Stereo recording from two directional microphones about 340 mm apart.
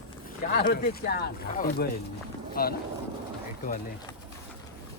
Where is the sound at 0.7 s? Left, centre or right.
Left.